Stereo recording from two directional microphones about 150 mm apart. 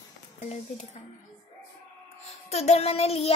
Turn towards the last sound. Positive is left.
turn(degrees=45)  # may be behind; listen again after turning